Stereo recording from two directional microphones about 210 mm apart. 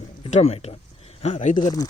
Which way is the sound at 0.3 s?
30° left (ahead or behind).